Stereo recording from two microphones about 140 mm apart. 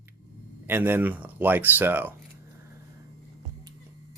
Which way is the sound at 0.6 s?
15° right (ahead or behind).